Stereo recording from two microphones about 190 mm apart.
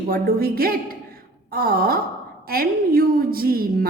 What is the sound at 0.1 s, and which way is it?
A woman's voice, 50° right (ahead or behind).